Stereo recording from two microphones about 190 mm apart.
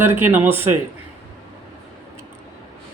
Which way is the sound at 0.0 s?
10° right (ahead or behind).